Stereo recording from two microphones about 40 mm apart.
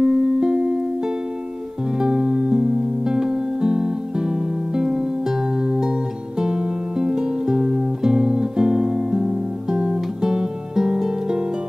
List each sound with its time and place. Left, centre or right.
0.0 s music: centre